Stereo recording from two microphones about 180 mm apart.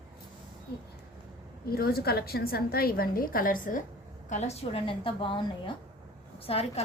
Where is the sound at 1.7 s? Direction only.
60° left (ahead or behind).